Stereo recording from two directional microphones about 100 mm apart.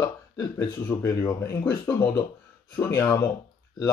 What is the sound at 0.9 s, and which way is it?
Speech, 20° left (ahead or behind).